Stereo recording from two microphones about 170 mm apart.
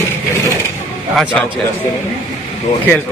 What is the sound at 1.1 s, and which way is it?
Speech, centre (ahead or behind).